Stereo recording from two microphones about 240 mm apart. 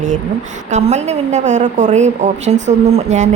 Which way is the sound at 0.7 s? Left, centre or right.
Right.